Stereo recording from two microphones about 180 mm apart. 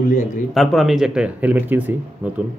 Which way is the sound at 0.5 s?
Centre (ahead or behind).